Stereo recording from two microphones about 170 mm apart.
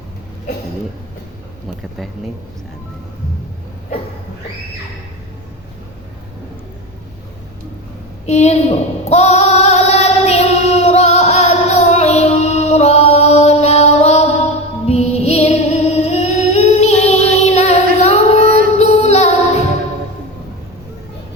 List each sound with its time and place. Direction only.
8.3 s female singing: 40° left (ahead or behind)
14.8 s music: 40° left (ahead or behind)
17.4 s a sound: 40° left (ahead or behind)
18.4 s music: 60° right (ahead or behind)
18.8 s music: 40° left (ahead or behind)